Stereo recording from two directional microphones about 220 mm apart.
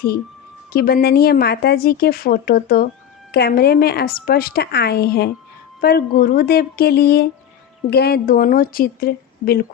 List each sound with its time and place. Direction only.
0.7 s a woman's voice: 45° left (ahead or behind)